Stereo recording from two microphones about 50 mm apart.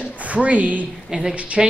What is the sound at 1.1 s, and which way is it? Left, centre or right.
Speech, centre.